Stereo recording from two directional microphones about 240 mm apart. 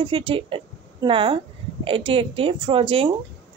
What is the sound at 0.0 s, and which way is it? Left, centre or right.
A woman's voice, right.